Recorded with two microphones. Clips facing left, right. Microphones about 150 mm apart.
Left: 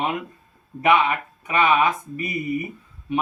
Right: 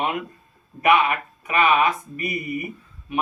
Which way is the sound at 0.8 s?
25° left (ahead or behind).